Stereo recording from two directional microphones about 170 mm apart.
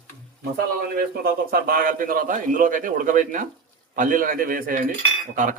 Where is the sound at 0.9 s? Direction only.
60° right (ahead or behind).